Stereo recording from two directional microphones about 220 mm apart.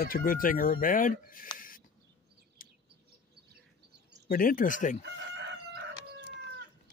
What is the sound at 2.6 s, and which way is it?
Bird, 40° left (ahead or behind).